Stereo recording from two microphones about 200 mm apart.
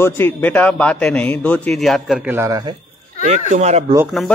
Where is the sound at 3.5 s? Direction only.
35° right (ahead or behind).